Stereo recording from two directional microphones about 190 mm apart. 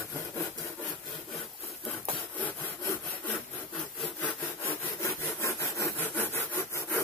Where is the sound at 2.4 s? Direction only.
10° left (ahead or behind).